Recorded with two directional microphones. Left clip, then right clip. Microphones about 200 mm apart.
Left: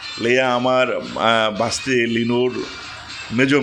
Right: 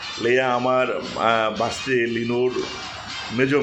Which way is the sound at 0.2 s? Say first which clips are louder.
Left 3 dB; 35° left (ahead or behind).